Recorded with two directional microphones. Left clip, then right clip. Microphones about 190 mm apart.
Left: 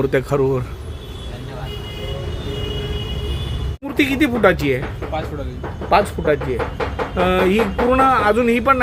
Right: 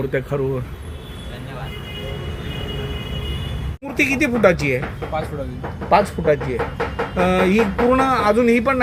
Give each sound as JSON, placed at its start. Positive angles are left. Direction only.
{"t": 0.0, "sound": "a man's voice", "side_deg": 25}
{"t": 3.9, "sound": "speech", "side_deg": 5}
{"t": 5.9, "sound": "speech", "side_deg": -5}